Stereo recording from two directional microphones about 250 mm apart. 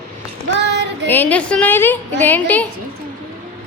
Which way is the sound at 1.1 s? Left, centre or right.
Centre.